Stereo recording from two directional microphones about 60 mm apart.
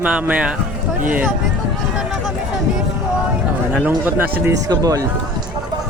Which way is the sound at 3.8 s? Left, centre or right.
Right.